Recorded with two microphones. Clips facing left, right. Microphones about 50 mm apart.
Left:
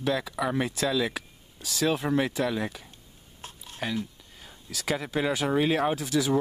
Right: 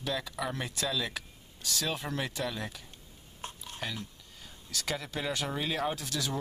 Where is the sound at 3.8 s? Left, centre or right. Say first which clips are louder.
Left 8 dB; centre.